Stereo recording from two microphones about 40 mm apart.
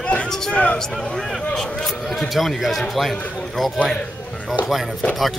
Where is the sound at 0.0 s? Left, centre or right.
Left.